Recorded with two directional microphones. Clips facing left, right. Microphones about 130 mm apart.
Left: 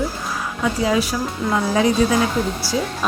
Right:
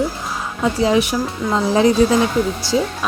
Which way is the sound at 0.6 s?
25° right (ahead or behind).